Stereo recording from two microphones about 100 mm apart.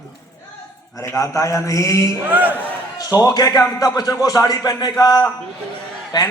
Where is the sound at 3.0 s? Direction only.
35° left (ahead or behind).